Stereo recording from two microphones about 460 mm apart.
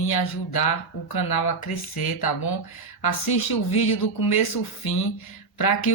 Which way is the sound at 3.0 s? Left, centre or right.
Left.